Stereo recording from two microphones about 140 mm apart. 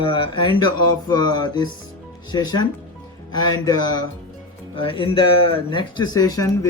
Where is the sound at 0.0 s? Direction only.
35° left (ahead or behind).